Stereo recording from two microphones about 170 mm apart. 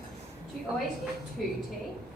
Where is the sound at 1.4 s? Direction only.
Centre (ahead or behind).